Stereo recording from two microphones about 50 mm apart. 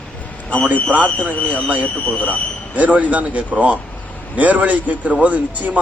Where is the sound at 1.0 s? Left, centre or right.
Left.